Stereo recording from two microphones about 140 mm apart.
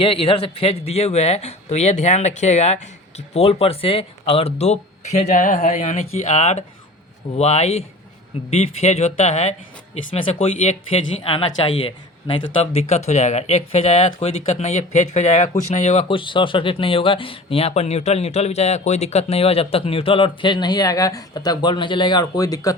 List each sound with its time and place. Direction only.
0.0 s speech: 40° left (ahead or behind)
13.1 s speech: 55° left (ahead or behind)
16.0 s speech: 35° left (ahead or behind)